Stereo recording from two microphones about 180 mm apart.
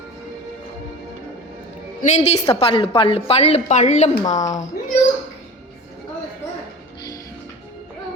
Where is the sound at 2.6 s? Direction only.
30° left (ahead or behind).